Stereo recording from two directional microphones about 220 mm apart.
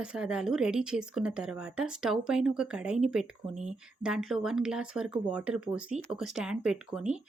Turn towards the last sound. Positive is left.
turn(degrees=-5)  # may be behind; listen again after turning